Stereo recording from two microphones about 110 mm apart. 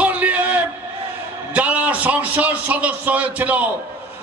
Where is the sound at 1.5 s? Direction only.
10° right (ahead or behind).